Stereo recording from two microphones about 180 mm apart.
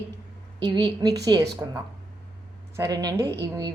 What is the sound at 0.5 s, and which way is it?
A woman's voice, 25° right (ahead or behind).